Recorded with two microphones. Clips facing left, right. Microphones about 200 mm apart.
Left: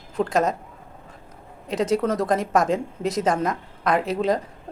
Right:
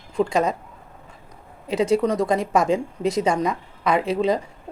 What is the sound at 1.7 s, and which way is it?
Speech, centre (ahead or behind).